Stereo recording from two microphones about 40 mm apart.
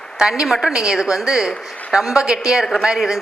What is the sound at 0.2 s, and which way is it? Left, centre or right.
A woman's voice, centre.